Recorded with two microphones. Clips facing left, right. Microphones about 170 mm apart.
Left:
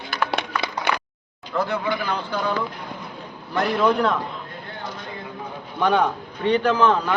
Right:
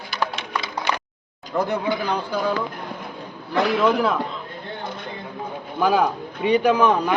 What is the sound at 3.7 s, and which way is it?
Speech, 5° right (ahead or behind).